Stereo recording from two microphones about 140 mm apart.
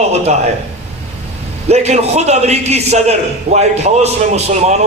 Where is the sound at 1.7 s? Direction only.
50° right (ahead or behind).